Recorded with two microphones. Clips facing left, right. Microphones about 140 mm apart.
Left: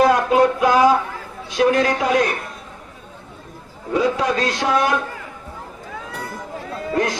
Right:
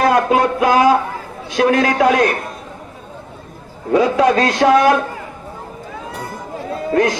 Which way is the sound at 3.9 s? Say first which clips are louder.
Right 6 dB; 75° right (ahead or behind).